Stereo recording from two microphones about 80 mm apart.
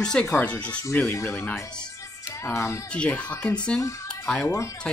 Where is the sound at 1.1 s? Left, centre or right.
Left.